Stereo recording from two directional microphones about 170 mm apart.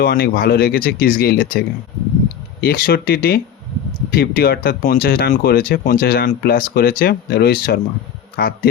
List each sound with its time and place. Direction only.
0.0 s speech: 60° left (ahead or behind)